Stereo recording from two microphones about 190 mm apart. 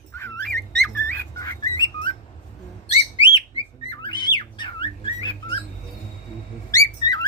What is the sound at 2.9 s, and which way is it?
Bird, 30° left (ahead or behind).